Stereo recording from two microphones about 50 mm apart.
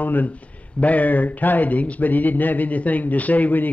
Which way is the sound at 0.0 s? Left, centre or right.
Left.